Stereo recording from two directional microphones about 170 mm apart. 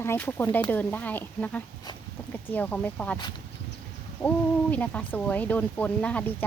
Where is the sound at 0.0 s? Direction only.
10° left (ahead or behind).